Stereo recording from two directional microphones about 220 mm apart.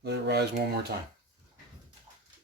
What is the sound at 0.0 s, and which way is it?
Speech, 50° right (ahead or behind).